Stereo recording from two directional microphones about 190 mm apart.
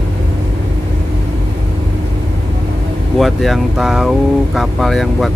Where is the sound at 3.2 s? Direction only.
Centre (ahead or behind).